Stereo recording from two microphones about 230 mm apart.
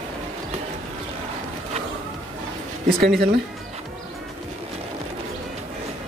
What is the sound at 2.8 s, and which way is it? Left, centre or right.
Speech, right.